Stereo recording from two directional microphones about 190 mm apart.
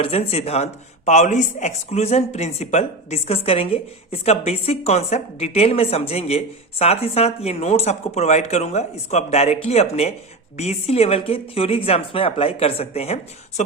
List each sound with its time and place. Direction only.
0.0 s speech: 30° left (ahead or behind)